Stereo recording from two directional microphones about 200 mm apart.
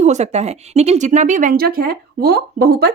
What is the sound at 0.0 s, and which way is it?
Speech, 35° right (ahead or behind).